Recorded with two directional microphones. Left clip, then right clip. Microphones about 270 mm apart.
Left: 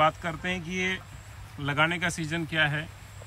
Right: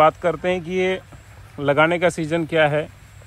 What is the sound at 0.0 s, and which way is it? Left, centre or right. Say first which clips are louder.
Speech: right 9 dB; centre.